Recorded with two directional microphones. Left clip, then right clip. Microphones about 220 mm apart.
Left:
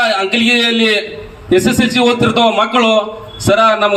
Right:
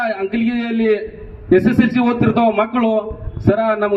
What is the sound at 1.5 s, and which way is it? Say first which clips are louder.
A man's voice: left 2 dB; 25° left (ahead or behind).